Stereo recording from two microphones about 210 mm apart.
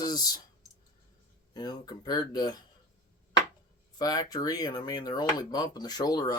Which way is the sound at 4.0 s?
20° left (ahead or behind).